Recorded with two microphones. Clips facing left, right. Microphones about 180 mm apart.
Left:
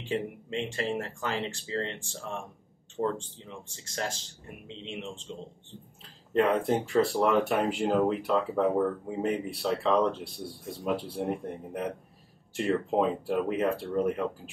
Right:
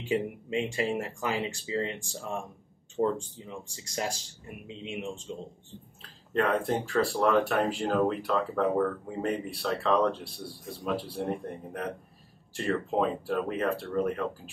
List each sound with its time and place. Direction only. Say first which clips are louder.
0.1 s speech: right 3 dB; 10° right (ahead or behind)
6.3 s speech: left 2 dB; 20° left (ahead or behind)
11.2 s speech: even; 10° left (ahead or behind)
12.5 s speech: left 2 dB; 20° left (ahead or behind)